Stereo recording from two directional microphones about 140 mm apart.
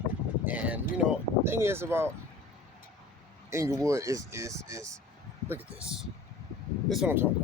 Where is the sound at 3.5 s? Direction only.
20° right (ahead or behind).